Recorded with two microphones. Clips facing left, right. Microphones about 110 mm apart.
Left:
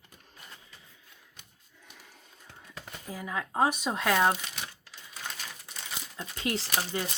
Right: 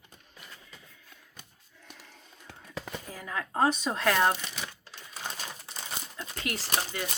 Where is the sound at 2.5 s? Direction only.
90° right.